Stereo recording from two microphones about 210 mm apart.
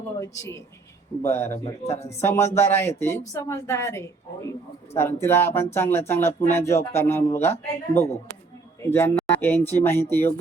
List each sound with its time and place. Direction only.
1.2 s a woman's voice: 10° left (ahead or behind)
1.5 s a man's voice: 30° left (ahead or behind)
2.2 s a woman's voice: 10° left (ahead or behind)